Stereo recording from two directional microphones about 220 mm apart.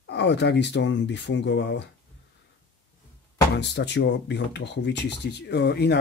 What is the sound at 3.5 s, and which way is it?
Speech, 50° left (ahead or behind).